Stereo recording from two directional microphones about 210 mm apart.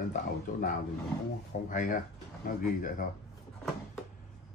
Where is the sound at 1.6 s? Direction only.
40° left (ahead or behind).